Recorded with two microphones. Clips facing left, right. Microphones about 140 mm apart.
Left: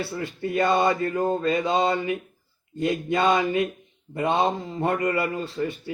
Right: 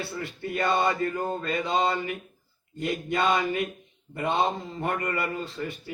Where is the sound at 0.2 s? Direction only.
25° left (ahead or behind).